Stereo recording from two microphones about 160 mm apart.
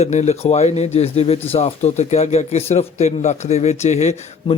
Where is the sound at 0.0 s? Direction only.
45° left (ahead or behind).